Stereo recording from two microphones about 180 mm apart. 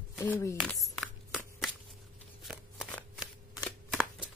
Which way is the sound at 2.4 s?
5° right (ahead or behind).